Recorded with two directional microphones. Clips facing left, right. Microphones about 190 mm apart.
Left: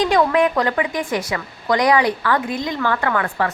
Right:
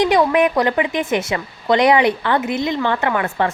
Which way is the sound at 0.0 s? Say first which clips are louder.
Right 1 dB; 20° right (ahead or behind).